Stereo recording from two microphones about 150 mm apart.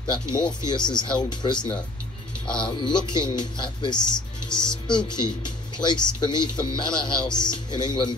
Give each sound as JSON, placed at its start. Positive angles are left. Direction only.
{"t": 0.1, "sound": "speech", "side_deg": 30}